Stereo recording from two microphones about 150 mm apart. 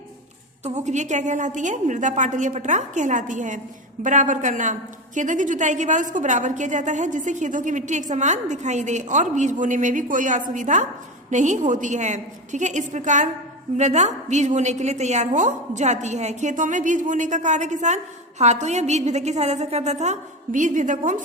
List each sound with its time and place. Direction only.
0.6 s a woman's voice: 50° right (ahead or behind)